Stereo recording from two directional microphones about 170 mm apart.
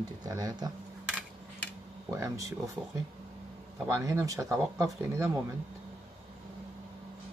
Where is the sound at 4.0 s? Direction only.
20° right (ahead or behind).